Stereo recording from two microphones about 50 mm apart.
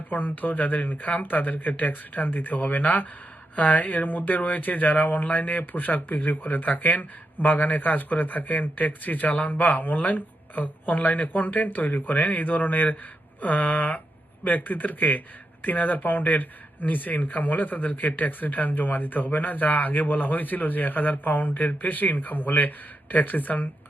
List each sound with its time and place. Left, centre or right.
0.1 s speech: left